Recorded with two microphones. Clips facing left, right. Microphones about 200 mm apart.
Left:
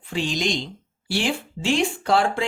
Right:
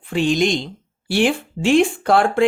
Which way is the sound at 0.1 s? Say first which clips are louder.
Right 7 dB; 55° right (ahead or behind).